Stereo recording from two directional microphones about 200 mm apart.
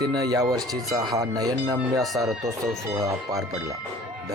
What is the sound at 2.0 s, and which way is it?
Speech, centre (ahead or behind).